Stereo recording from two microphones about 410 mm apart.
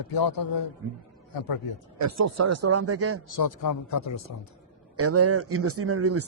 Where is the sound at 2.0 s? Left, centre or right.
Right.